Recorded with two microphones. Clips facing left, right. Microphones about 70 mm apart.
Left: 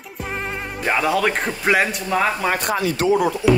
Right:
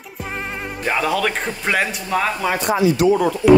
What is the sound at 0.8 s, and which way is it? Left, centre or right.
Speech, centre.